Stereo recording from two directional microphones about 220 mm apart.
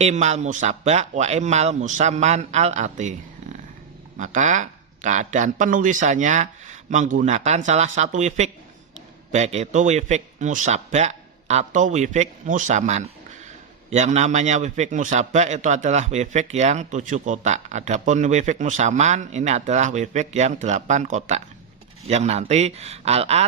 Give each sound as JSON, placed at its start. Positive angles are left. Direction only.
{"t": 0.0, "sound": "a man's voice", "side_deg": -30}
{"t": 4.2, "sound": "a man's voice", "side_deg": -35}